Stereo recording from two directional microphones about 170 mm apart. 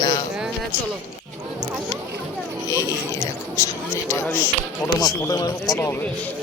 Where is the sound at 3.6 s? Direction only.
15° left (ahead or behind).